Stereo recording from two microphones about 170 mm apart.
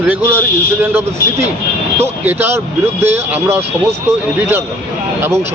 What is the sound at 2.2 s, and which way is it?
Speech, 10° right (ahead or behind).